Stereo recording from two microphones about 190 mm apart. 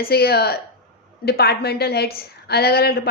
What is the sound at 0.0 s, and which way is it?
A woman's voice, 55° left (ahead or behind).